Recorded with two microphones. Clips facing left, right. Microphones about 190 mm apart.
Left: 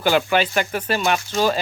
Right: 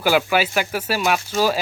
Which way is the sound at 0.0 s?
5° right (ahead or behind).